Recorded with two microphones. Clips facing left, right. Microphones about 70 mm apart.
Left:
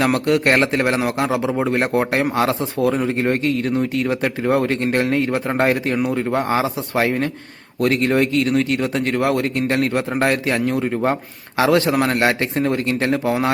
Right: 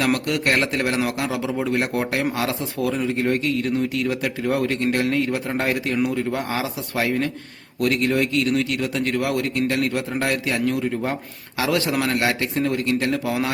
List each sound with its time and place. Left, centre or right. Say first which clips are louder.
0.0 s speech: left 5 dB; left